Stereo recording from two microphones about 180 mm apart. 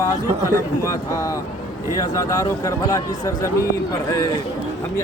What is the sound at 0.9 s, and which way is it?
Speech, 20° left (ahead or behind).